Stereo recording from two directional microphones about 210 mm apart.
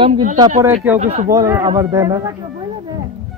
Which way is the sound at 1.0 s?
35° right (ahead or behind).